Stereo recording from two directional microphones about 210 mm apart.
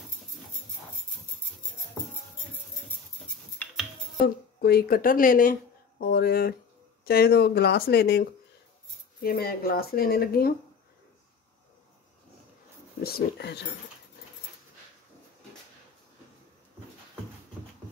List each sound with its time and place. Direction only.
4.6 s speech: 45° left (ahead or behind)
13.0 s speech: 50° left (ahead or behind)